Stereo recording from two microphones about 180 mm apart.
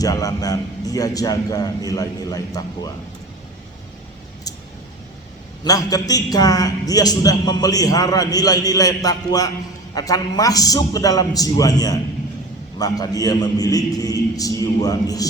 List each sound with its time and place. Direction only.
0.0 s a man's voice: 20° left (ahead or behind)
5.6 s a man's voice: 20° left (ahead or behind)